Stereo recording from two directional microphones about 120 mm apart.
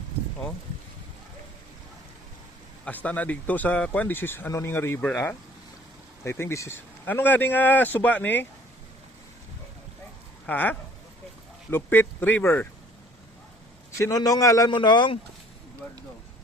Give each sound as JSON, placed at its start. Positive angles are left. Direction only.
{"t": 2.8, "sound": "speech", "side_deg": 10}
{"t": 10.4, "sound": "speech", "side_deg": 15}
{"t": 14.0, "sound": "a man's voice", "side_deg": 30}
{"t": 14.8, "sound": "speech", "side_deg": 40}